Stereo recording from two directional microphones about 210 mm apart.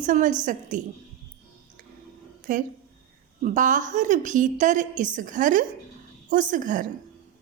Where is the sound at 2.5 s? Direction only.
40° right (ahead or behind).